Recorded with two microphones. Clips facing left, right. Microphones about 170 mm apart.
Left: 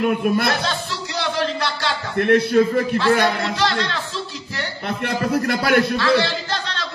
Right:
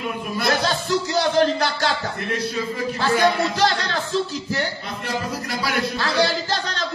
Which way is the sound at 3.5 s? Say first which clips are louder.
Right 1 dB; 45° right (ahead or behind).